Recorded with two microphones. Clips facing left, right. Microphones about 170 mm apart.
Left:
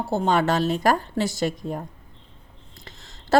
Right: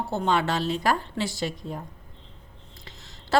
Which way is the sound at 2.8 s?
50° left (ahead or behind).